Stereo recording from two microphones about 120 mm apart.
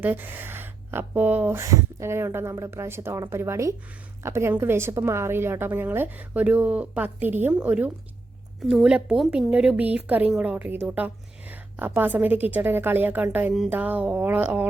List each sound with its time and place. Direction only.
0.0 s a woman's voice: 15° right (ahead or behind)